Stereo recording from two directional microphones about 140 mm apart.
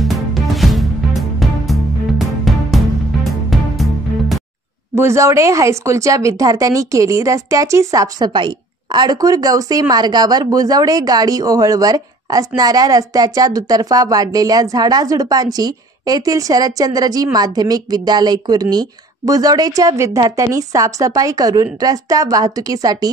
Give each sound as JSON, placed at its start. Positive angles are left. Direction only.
{"t": 0.0, "sound": "music", "side_deg": 0}
{"t": 4.9, "sound": "speech", "side_deg": -20}